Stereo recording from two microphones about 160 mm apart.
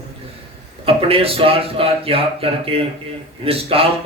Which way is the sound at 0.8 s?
35° right (ahead or behind).